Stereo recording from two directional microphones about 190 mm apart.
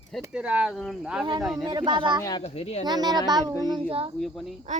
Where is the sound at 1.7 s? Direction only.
25° right (ahead or behind).